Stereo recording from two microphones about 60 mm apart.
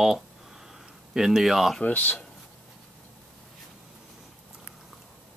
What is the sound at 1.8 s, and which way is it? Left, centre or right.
Speech, left.